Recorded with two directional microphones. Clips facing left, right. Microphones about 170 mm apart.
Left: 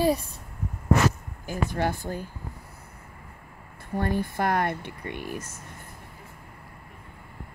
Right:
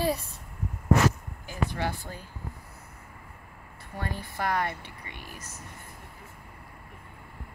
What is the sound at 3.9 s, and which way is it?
Speech, 50° left (ahead or behind).